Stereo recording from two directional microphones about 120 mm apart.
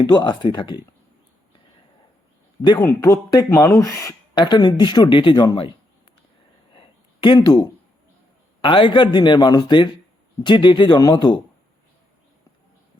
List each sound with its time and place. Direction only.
0.0 s speech: 40° left (ahead or behind)
2.6 s speech: 35° left (ahead or behind)
4.4 s speech: 40° left (ahead or behind)
6.7 s a sound: 40° left (ahead or behind)
8.6 s speech: 45° left (ahead or behind)